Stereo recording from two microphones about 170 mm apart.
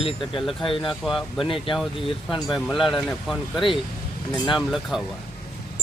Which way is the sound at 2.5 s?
Centre (ahead or behind).